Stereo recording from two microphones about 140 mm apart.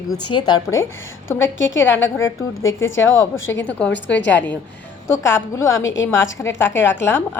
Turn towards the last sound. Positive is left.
turn(degrees=15)  # may be behind; listen again after turning